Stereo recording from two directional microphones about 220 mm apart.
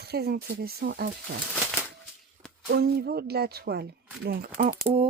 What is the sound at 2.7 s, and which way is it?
Speech, 45° right (ahead or behind).